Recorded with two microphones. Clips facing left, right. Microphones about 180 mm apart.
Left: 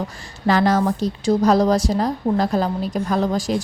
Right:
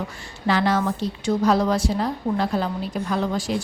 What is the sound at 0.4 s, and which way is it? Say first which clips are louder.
A woman's voice: left 4 dB; 40° left (ahead or behind).